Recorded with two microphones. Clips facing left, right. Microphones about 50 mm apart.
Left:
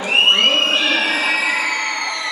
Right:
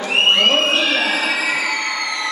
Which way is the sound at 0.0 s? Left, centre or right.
Centre.